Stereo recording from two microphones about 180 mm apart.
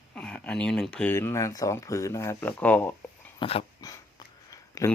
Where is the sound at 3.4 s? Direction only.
30° left (ahead or behind).